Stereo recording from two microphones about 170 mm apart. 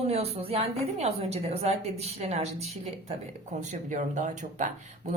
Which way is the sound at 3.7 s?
45° right (ahead or behind).